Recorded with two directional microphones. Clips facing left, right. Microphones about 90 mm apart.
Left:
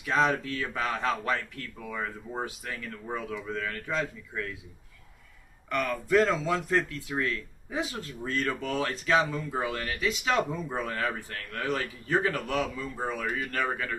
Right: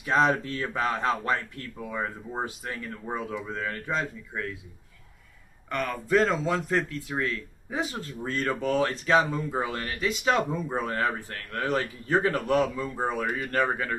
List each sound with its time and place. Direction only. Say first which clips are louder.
0.0 s speech: right 3 dB; 40° right (ahead or behind)
5.6 s speech: even; 30° right (ahead or behind)